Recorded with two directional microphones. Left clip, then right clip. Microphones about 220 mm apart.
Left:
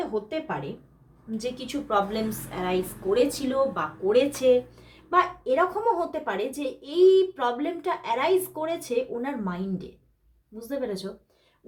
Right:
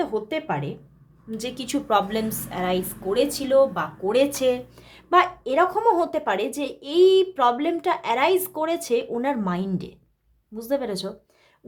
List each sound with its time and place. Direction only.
0.0 s a woman's voice: 50° right (ahead or behind)